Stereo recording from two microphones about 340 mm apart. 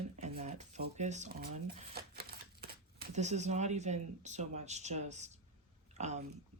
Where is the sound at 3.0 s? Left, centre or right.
Centre.